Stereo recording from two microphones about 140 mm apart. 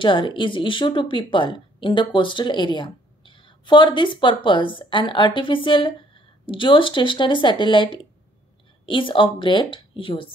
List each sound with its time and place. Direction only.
0.0 s speech: 35° left (ahead or behind)